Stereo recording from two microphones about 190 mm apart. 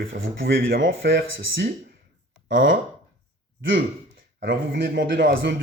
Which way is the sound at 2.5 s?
45° right (ahead or behind).